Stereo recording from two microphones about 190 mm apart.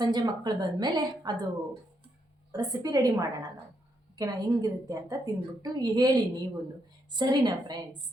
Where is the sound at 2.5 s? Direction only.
20° right (ahead or behind).